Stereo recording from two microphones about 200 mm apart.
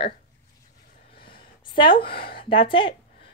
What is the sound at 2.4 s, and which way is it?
Speech, 25° left (ahead or behind).